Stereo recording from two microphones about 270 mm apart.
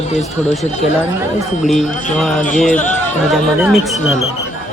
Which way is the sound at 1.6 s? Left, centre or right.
Centre.